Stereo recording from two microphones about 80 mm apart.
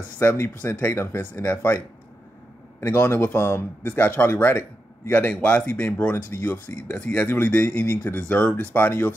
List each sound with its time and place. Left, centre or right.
0.2 s speech: left
2.8 s speech: left
7.0 s speech: centre